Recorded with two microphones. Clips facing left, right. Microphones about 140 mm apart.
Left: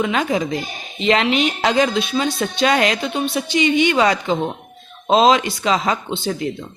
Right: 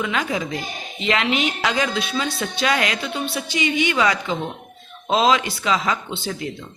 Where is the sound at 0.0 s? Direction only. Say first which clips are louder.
Left 5 dB; 25° left (ahead or behind).